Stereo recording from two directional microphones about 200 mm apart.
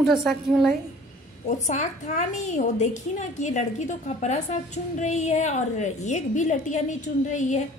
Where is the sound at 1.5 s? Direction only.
35° left (ahead or behind).